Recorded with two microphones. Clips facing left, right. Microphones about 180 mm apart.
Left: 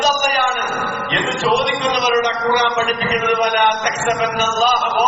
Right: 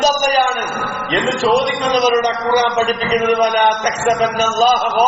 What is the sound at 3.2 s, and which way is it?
A man's voice, 30° right (ahead or behind).